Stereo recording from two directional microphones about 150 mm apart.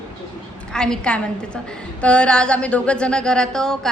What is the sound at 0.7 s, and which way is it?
A woman's voice, 5° left (ahead or behind).